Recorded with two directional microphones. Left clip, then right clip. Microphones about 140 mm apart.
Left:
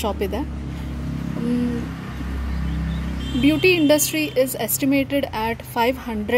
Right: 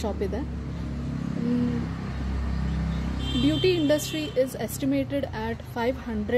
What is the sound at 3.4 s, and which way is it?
A woman's voice, 15° left (ahead or behind).